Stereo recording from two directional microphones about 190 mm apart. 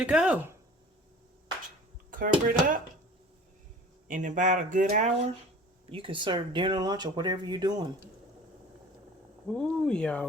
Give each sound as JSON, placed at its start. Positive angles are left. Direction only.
{"t": 0.0, "sound": "speech", "side_deg": -5}
{"t": 2.0, "sound": "speech", "side_deg": -45}
{"t": 4.1, "sound": "speech", "side_deg": -40}
{"t": 5.9, "sound": "speech", "side_deg": -25}
{"t": 9.5, "sound": "speech", "side_deg": 5}